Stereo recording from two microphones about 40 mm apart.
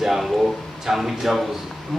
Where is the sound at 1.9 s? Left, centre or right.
Centre.